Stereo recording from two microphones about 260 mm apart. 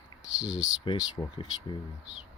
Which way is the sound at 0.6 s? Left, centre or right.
Centre.